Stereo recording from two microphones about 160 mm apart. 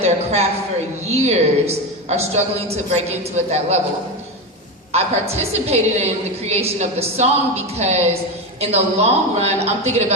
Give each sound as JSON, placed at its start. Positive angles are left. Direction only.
{"t": 0.0, "sound": "a sound", "side_deg": -40}
{"t": 1.1, "sound": "a woman's voice", "side_deg": -45}
{"t": 4.9, "sound": "a woman's voice", "side_deg": -40}